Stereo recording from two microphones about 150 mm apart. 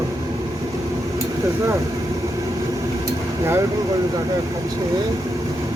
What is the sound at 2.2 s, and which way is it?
Vehicle, 25° right (ahead or behind).